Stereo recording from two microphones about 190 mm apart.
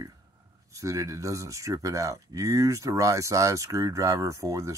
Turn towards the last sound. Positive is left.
turn(degrees=-15)  # may be behind; listen again after turning